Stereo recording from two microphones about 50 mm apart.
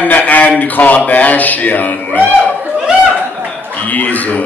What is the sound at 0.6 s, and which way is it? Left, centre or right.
Speech, left.